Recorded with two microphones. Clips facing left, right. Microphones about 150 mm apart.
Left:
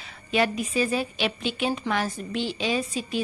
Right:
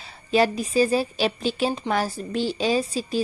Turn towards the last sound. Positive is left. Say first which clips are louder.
# right 4 dB
turn(degrees=-35)  # may be behind; listen again after turning